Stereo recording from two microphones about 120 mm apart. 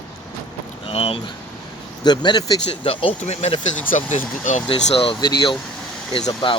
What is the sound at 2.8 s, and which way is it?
Speech, 45° left (ahead or behind).